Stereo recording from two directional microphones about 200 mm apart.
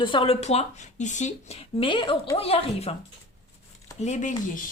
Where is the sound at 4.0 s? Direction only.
35° left (ahead or behind).